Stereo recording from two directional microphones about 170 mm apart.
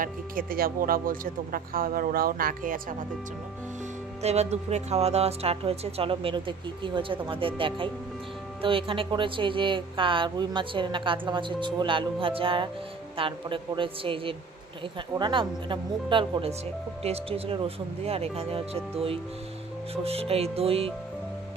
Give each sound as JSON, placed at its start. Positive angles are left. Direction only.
{"t": 0.0, "sound": "speech", "side_deg": -55}
{"t": 4.2, "sound": "speech", "side_deg": -40}